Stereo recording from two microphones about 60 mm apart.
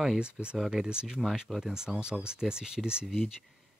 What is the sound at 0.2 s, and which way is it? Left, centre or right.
Speech, centre.